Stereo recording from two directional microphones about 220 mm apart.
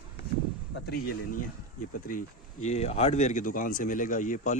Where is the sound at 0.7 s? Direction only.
45° left (ahead or behind).